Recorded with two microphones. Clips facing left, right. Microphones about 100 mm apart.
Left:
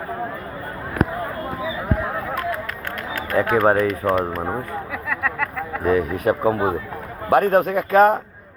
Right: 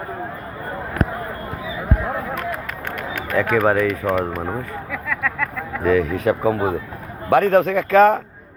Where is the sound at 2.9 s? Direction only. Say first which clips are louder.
Right 1 dB; 20° right (ahead or behind).